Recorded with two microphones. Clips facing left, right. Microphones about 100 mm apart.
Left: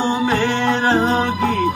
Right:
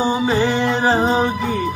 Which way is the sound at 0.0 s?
10° right (ahead or behind).